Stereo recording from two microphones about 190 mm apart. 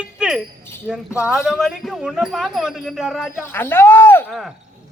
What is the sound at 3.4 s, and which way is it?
Speech, 10° left (ahead or behind).